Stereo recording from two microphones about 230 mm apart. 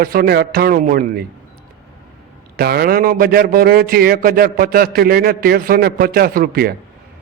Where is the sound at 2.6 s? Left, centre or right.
Right.